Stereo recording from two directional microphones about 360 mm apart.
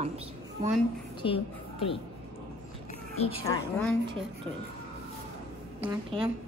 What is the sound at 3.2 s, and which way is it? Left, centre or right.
Speech, centre.